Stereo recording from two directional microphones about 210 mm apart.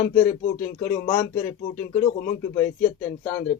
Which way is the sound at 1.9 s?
45° left (ahead or behind).